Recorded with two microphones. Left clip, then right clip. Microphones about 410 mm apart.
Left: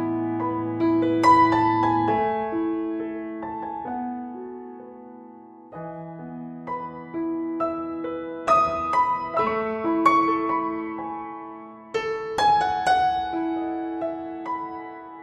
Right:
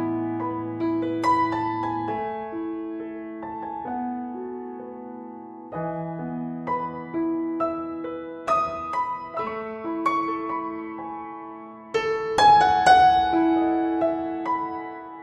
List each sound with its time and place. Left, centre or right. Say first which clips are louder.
0.0 s music: left 1 dB; centre; by 3.1 s left
3.5 s music: right 2 dB; centre
5.8 s music: right 6 dB; right
7.2 s music: right 1 dB; centre
8.5 s music: left 4 dB; left
11.9 s music: right 3 dB; right